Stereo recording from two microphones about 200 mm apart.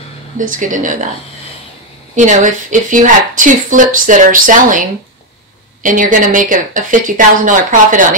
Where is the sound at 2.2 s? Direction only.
40° right (ahead or behind).